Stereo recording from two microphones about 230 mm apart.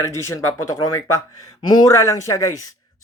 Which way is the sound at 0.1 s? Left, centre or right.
Centre.